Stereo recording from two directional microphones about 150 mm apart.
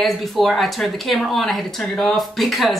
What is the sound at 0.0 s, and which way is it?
Speech, centre (ahead or behind).